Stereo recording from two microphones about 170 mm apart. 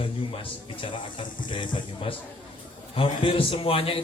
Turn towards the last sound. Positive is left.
turn(degrees=30)  # may be behind; listen again after turning